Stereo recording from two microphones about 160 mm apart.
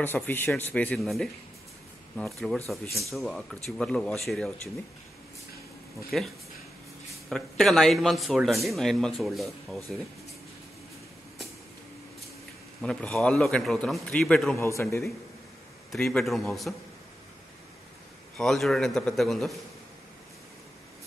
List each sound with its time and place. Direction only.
0.0 s a man's voice: 15° left (ahead or behind)
6.0 s a man's voice: centre (ahead or behind)
12.8 s a man's voice: 5° left (ahead or behind)
14.6 s a man's voice: 15° left (ahead or behind)
15.9 s a man's voice: 5° left (ahead or behind)
18.4 s a man's voice: 5° left (ahead or behind)